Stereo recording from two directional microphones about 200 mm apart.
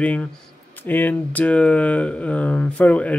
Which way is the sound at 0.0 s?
5° left (ahead or behind).